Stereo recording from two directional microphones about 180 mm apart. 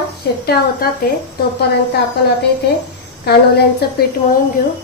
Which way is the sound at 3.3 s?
65° left (ahead or behind).